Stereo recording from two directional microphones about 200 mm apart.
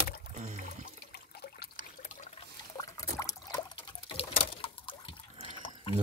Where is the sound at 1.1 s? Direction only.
50° left (ahead or behind).